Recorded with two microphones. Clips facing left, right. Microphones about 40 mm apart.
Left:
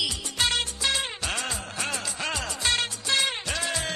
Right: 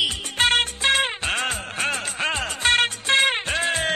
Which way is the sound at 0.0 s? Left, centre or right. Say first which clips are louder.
Right 6 dB; right.